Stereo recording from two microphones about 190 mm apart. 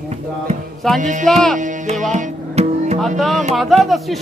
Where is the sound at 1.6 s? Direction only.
40° right (ahead or behind).